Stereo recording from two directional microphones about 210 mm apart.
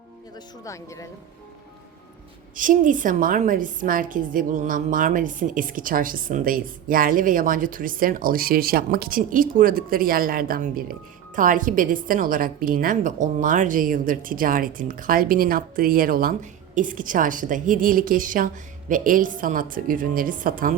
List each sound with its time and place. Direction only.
0.3 s speech: 15° left (ahead or behind)
2.6 s a woman's voice: 40° right (ahead or behind)